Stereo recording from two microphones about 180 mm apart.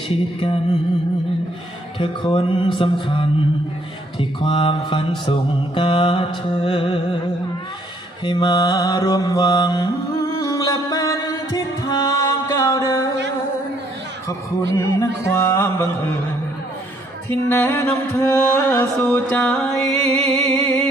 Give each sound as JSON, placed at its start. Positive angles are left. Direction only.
{"t": 0.1, "sound": "music", "side_deg": 30}
{"t": 2.0, "sound": "music", "side_deg": 25}
{"t": 8.2, "sound": "mantra", "side_deg": 25}
{"t": 15.3, "sound": "music", "side_deg": 15}
{"t": 17.5, "sound": "music", "side_deg": 10}